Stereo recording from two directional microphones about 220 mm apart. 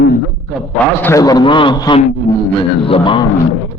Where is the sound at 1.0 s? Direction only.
15° left (ahead or behind).